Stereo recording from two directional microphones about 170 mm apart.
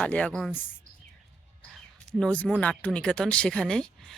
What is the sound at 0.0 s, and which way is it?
Speech, 5° left (ahead or behind).